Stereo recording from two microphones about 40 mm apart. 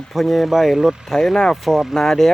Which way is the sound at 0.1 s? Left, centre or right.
Centre.